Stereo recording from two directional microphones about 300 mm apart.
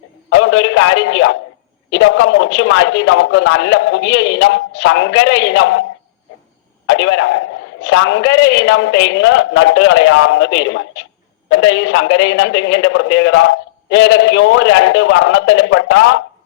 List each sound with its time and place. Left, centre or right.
0.3 s a man's voice: left
6.8 s a man's voice: left